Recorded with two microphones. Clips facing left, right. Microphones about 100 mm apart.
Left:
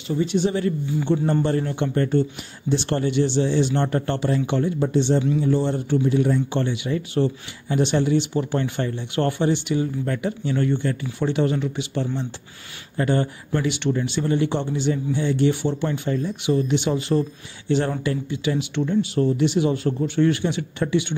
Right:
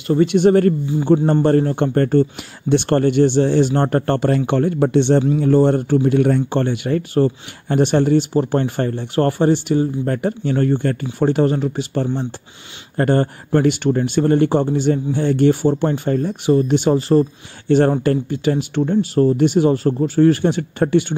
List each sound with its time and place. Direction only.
0.1 s speech: 65° right (ahead or behind)
0.9 s speech: 40° right (ahead or behind); by 5.2 s 65° right (ahead or behind)
5.4 s speech: 55° right (ahead or behind)